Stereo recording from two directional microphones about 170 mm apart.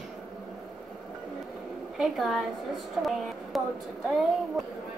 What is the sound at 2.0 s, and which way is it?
A woman's voice, centre (ahead or behind).